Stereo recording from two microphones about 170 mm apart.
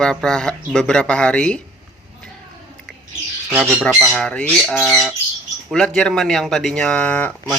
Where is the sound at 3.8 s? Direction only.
Centre (ahead or behind).